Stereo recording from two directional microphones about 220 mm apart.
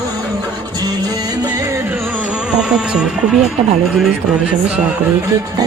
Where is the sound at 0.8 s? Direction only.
15° right (ahead or behind); by 4.1 s centre (ahead or behind).